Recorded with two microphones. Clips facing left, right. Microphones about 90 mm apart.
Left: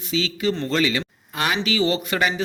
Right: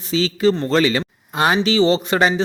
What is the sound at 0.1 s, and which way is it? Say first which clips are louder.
Speech: right 6 dB; 35° right (ahead or behind).